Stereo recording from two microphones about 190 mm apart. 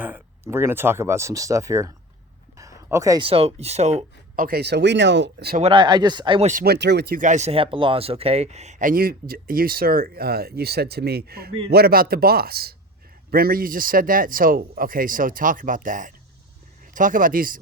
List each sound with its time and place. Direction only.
0.0 s speech: 10° right (ahead or behind)
2.6 s a sound: 15° right (ahead or behind)
3.2 s speech: 30° right (ahead or behind)
4.4 s speech: 60° right (ahead or behind)
5.7 s speech: 20° right (ahead or behind)
6.5 s speech: 50° right (ahead or behind)